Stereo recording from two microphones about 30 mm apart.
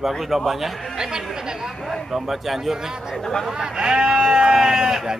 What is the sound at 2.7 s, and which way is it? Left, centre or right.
Speech, centre.